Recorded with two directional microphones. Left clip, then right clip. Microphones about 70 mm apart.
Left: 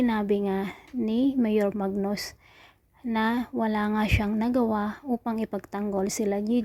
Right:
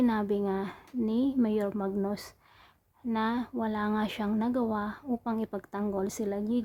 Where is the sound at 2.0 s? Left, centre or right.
Left.